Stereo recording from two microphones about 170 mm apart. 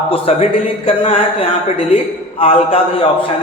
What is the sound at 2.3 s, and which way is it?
Speech, 35° left (ahead or behind).